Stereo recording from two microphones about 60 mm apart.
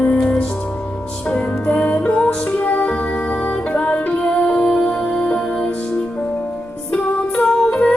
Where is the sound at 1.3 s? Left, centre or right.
Left.